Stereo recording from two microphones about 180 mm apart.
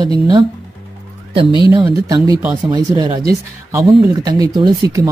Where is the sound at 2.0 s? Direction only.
20° right (ahead or behind).